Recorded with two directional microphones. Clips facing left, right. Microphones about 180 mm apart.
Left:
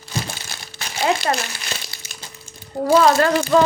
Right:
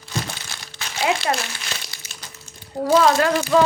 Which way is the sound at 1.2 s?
Centre (ahead or behind).